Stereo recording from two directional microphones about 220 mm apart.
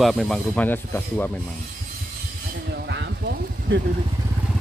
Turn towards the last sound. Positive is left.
turn(degrees=-55)  # may be behind; listen again after turning